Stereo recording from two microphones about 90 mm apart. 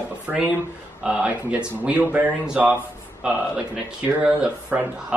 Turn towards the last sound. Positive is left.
turn(degrees=-10)  # may be behind; listen again after turning